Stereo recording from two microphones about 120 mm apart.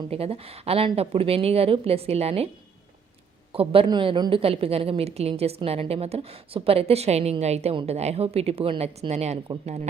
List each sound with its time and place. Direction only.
0.1 s a woman's voice: 55° right (ahead or behind)
3.5 s a woman's voice: 50° right (ahead or behind)